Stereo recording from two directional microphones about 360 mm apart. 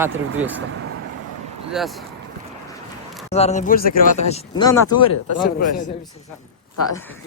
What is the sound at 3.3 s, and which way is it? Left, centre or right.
Speech, centre.